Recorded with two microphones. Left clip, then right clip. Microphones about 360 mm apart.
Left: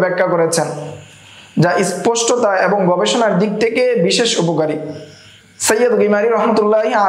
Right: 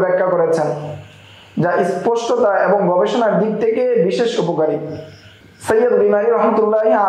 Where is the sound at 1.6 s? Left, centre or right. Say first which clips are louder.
Left 1 dB; left.